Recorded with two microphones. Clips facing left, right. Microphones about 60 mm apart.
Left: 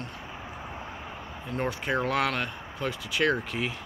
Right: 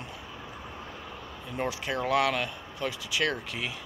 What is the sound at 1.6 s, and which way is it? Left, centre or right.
Speech, centre.